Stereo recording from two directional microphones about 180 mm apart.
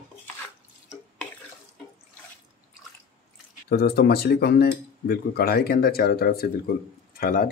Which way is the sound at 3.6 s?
60° left (ahead or behind).